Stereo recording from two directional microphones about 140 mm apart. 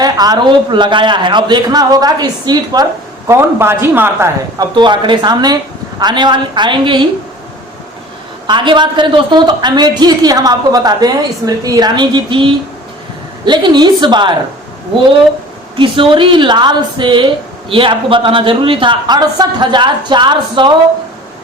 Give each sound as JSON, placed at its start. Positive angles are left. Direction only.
{"t": 0.0, "sound": "a woman's voice", "side_deg": -30}
{"t": 4.5, "sound": "a woman's voice", "side_deg": -35}
{"t": 8.4, "sound": "a woman's voice", "side_deg": -35}
{"t": 15.7, "sound": "a woman's voice", "side_deg": -35}